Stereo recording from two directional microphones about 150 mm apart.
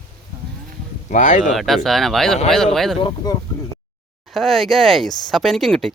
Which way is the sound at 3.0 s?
35° left (ahead or behind).